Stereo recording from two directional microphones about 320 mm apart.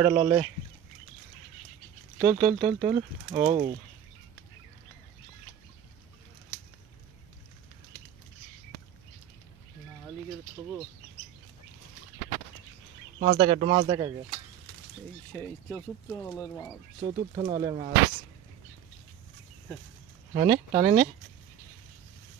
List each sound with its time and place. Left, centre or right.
0.0 s speech: centre
2.1 s speech: centre
13.2 s speech: right
15.3 s speech: centre
17.0 s speech: centre
20.3 s speech: centre